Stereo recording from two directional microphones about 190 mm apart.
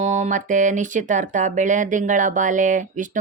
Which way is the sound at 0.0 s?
40° right (ahead or behind).